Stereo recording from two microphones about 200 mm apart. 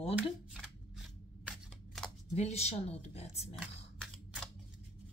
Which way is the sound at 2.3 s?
30° left (ahead or behind).